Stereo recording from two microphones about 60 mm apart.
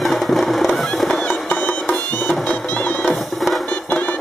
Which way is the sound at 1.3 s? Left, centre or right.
Left.